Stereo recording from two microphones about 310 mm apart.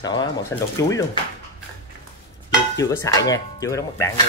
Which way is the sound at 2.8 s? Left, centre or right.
Centre.